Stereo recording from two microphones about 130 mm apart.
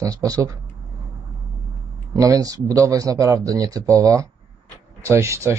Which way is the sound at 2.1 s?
25° right (ahead or behind).